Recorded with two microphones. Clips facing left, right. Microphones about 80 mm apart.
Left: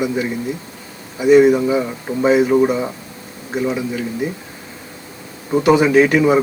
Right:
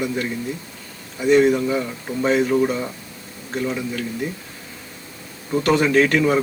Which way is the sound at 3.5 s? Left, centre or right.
Centre.